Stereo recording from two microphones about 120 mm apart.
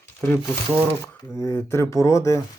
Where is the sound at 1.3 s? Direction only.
20° left (ahead or behind).